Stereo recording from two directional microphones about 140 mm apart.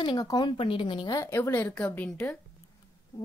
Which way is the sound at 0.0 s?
30° left (ahead or behind).